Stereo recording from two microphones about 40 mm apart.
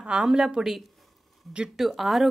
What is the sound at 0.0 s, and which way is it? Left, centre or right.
Speech, centre.